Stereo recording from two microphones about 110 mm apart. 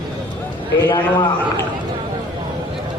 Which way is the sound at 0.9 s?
45° left (ahead or behind).